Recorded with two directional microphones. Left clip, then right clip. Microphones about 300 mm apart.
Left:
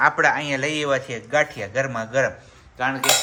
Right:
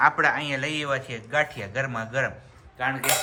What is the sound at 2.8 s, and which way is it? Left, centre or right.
Cutlery, left.